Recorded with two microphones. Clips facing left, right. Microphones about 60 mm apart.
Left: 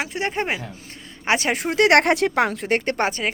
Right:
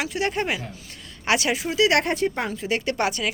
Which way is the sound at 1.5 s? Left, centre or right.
Left.